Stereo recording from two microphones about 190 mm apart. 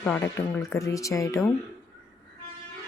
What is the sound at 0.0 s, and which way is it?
Speech, 10° left (ahead or behind).